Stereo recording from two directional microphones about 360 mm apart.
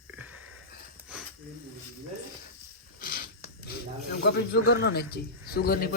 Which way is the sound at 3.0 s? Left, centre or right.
Left.